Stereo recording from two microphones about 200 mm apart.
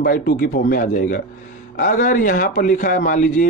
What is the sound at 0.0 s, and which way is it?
Speech, 45° left (ahead or behind).